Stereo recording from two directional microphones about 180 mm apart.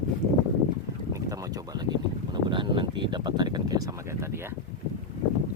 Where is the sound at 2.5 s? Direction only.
25° right (ahead or behind).